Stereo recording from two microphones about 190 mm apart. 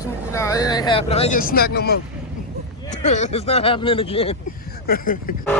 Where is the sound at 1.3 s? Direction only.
50° left (ahead or behind).